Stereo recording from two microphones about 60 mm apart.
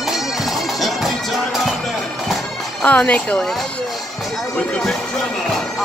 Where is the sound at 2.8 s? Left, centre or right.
Left.